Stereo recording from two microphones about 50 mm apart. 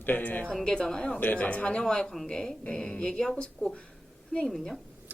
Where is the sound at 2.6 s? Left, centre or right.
Left; by 4.8 s centre.